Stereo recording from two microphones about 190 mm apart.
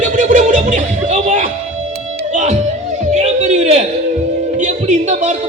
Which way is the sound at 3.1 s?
35° right (ahead or behind).